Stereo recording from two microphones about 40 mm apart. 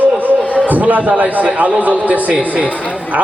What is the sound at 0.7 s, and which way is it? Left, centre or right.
A man's voice, right.